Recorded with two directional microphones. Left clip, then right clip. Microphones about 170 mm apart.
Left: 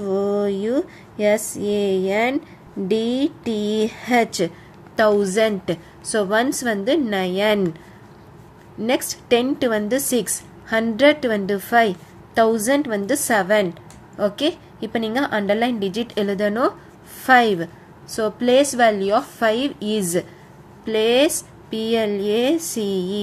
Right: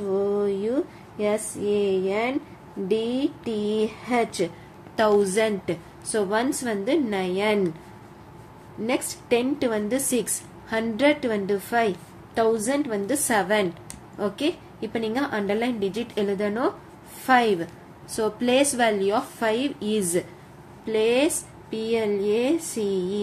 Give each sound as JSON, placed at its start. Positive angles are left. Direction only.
{"t": 0.1, "sound": "a sound", "side_deg": 45}
{"t": 2.9, "sound": "a woman's voice", "side_deg": 40}
{"t": 4.9, "sound": "a woman's voice", "side_deg": 25}
{"t": 8.8, "sound": "a woman's voice", "side_deg": 30}